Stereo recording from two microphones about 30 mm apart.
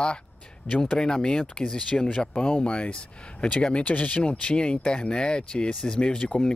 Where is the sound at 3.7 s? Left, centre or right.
Left.